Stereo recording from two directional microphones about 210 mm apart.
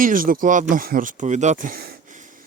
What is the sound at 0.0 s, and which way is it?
Speech, 40° right (ahead or behind).